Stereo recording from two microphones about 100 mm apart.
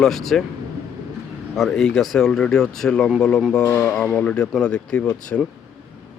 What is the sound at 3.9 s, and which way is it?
Speech, 10° left (ahead or behind).